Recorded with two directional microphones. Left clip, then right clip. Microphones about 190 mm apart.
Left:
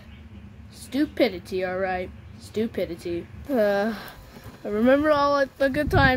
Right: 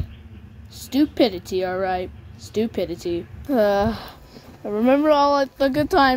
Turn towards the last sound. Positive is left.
turn(degrees=-15)  # may be behind; listen again after turning